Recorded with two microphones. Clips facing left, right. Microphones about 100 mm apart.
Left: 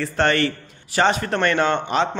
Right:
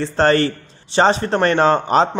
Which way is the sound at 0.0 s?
30° right (ahead or behind).